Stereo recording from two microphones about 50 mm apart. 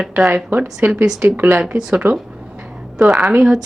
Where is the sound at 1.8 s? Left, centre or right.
Right.